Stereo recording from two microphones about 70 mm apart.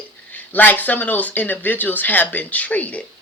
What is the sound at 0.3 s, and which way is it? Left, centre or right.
Speech, left.